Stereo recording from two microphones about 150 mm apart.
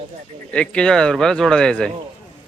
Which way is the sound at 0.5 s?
5° left (ahead or behind).